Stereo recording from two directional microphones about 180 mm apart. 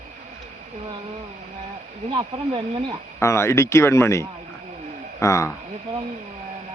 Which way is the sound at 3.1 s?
15° left (ahead or behind).